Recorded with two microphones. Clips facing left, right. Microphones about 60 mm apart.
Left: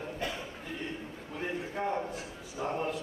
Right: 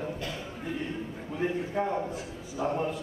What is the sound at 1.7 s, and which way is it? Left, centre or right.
Speech, centre.